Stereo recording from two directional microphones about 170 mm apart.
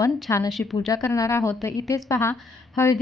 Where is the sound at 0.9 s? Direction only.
20° left (ahead or behind).